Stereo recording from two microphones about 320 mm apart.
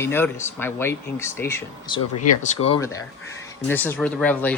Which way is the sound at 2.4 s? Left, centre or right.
Centre.